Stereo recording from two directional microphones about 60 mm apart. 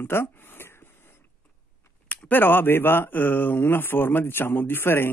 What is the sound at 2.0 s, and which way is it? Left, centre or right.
Speech, left.